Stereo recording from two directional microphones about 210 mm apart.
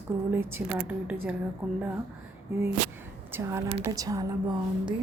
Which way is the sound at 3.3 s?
15° right (ahead or behind).